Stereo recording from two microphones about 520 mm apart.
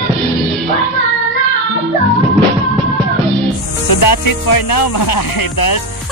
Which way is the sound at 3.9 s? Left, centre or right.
Left.